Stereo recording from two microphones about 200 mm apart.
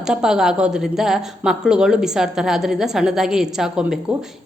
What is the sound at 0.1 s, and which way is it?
A woman's voice, 5° right (ahead or behind).